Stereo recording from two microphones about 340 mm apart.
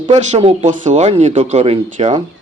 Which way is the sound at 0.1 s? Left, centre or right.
Centre.